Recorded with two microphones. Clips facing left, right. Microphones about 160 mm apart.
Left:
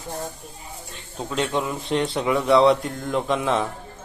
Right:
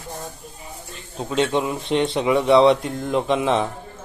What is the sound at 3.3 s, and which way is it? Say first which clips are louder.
Speech: right 2 dB; 20° right (ahead or behind).